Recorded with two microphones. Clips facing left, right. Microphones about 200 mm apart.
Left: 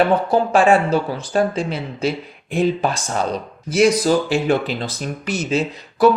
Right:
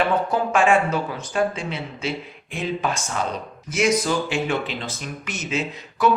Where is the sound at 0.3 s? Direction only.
35° left (ahead or behind).